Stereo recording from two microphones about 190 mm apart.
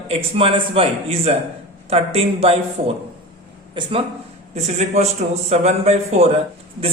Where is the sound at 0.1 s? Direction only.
30° right (ahead or behind).